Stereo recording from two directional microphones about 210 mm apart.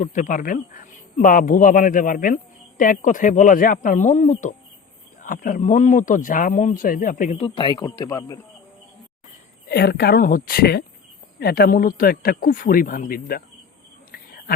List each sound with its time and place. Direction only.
0.0 s speech: 40° left (ahead or behind); by 8.4 s 15° left (ahead or behind)
9.6 s speech: 50° left (ahead or behind)